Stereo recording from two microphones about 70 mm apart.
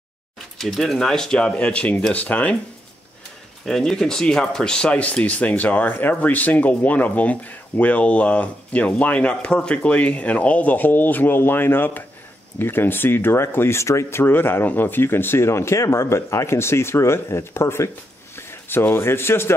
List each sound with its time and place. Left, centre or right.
0.6 s speech: centre
3.6 s speech: centre; by 19.5 s left